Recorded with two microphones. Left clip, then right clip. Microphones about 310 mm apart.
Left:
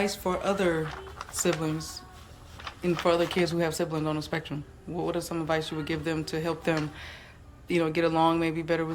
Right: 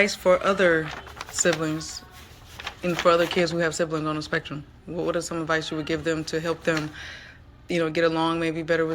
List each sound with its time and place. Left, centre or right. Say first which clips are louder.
0.0 s speech: right 8 dB; centre
2.6 s a sound: right 5 dB; right
3.0 s speech: right 6 dB; centre